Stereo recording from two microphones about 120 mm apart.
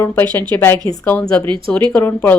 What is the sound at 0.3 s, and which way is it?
A woman's voice, 15° left (ahead or behind).